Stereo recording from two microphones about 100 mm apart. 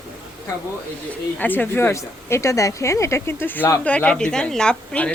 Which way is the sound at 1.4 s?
20° left (ahead or behind).